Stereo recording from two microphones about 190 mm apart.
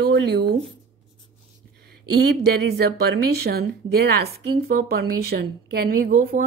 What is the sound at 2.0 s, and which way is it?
Speech, 55° right (ahead or behind).